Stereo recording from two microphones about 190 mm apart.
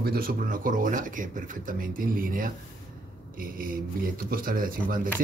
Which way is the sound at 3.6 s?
50° right (ahead or behind).